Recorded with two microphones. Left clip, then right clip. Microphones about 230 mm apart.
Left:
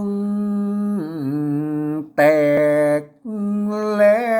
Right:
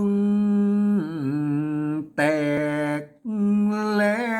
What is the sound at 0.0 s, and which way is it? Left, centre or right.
Humming, centre.